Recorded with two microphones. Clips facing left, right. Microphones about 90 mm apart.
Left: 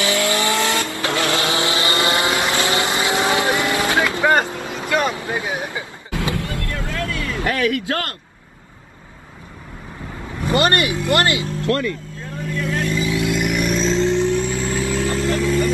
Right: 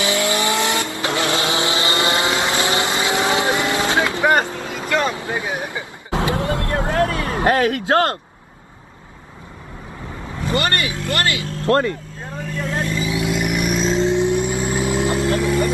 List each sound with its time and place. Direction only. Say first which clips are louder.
0.0 s vehicle: even; 20° right (ahead or behind)
4.4 s vehicle: even; 15° left (ahead or behind)
5.3 s a sound: even; 20° left (ahead or behind)
6.0 s vehicle: right 5 dB; 25° right (ahead or behind)
10.4 s vehicle: left 3 dB; 20° left (ahead or behind)
11.6 s vehicle: right 6 dB; 30° right (ahead or behind); by 15.7 s 15° right (ahead or behind)